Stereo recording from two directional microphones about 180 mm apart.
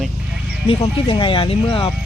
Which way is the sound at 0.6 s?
30° left (ahead or behind).